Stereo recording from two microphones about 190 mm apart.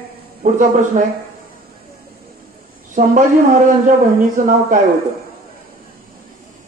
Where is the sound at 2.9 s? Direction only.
45° right (ahead or behind).